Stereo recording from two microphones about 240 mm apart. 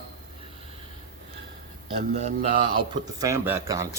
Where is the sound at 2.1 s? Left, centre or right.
Right.